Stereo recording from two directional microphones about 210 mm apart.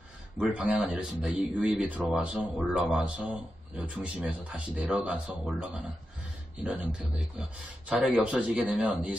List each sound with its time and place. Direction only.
0.4 s a man's voice: 5° right (ahead or behind)